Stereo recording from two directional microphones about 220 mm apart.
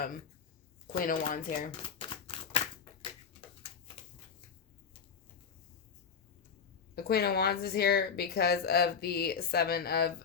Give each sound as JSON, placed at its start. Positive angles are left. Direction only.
{"t": 0.9, "sound": "speech", "side_deg": 40}
{"t": 1.7, "sound": "a sound", "side_deg": 25}
{"t": 6.9, "sound": "a woman's voice", "side_deg": 45}